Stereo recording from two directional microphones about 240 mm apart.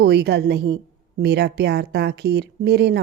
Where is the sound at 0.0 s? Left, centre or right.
Right.